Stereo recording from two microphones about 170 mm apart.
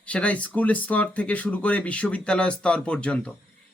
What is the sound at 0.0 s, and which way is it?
Speech, 5° left (ahead or behind).